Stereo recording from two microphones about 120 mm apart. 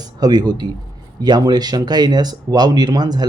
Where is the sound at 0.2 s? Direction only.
35° right (ahead or behind).